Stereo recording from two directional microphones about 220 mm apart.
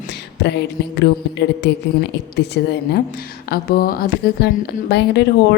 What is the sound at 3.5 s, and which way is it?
A woman's voice, 40° left (ahead or behind).